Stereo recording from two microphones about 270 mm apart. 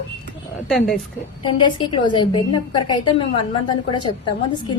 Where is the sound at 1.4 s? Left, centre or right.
Centre.